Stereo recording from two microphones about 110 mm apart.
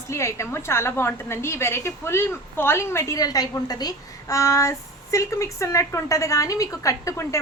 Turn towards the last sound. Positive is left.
turn(degrees=25)  # may be behind; listen again after turning